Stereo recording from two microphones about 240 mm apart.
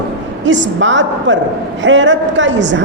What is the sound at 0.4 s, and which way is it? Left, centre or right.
A woman's voice, right.